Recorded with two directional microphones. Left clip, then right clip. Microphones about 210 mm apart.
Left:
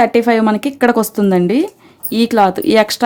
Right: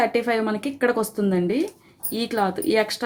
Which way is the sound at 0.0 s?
50° left (ahead or behind).